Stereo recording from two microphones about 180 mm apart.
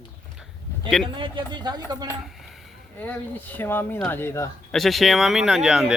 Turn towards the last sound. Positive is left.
turn(degrees=-5)  # may be behind; listen again after turning